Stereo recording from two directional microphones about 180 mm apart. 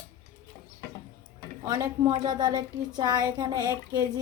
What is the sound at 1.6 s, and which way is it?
Speech, 20° right (ahead or behind).